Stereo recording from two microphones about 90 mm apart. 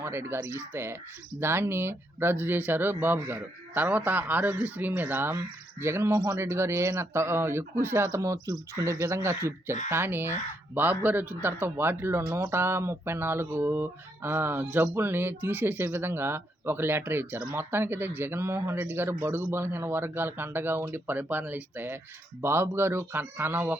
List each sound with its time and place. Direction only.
0.0 s speech: 25° right (ahead or behind)